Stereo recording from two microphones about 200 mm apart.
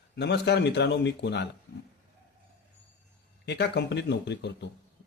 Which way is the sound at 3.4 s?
55° left (ahead or behind).